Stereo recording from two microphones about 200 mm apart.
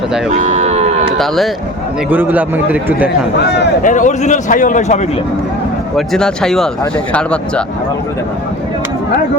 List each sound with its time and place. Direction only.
0.3 s a sound: 35° right (ahead or behind)
2.0 s speech: 10° right (ahead or behind)
3.8 s a man's voice: 40° left (ahead or behind)
6.1 s speech: 5° left (ahead or behind)